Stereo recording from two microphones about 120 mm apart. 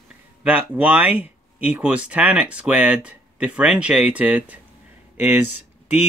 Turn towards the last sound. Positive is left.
turn(degrees=-15)  # may be behind; listen again after turning